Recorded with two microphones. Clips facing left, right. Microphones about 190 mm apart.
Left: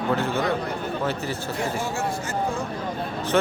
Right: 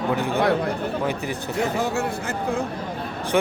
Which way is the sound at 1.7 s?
65° right (ahead or behind).